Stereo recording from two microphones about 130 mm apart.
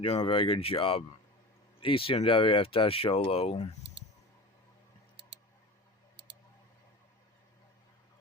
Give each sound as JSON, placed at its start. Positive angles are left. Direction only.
{"t": 0.2, "sound": "speech", "side_deg": 45}